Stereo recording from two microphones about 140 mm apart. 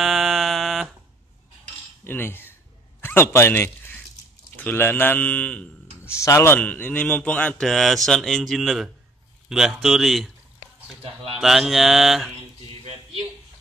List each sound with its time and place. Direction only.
0.0 s fire alarm: centre (ahead or behind)
2.0 s a man's voice: 15° left (ahead or behind)
6.2 s a man's voice: 20° left (ahead or behind); by 8.9 s 5° right (ahead or behind)
9.5 s mantra: 5° right (ahead or behind)
11.3 s mantra: centre (ahead or behind)